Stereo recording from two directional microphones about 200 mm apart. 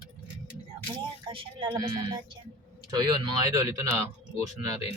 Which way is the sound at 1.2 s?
25° right (ahead or behind).